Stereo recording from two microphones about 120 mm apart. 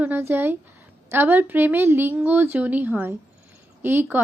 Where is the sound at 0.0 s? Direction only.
15° right (ahead or behind).